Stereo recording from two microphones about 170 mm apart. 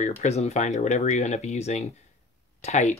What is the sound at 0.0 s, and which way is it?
Speech, 40° left (ahead or behind).